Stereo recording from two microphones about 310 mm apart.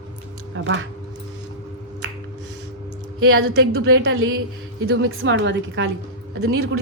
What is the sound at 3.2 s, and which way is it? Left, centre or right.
A woman's voice, right.